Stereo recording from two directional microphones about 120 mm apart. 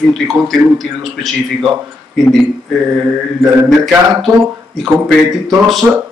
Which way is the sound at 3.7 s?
Centre (ahead or behind).